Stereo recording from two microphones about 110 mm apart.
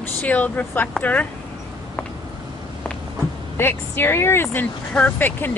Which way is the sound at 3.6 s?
20° left (ahead or behind).